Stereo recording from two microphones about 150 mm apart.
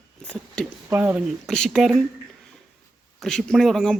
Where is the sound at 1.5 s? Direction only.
Centre (ahead or behind).